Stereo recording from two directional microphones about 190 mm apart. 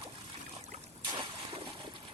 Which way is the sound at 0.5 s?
35° right (ahead or behind).